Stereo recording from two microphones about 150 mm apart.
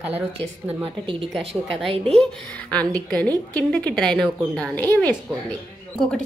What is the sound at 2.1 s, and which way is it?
A woman's voice, 5° left (ahead or behind).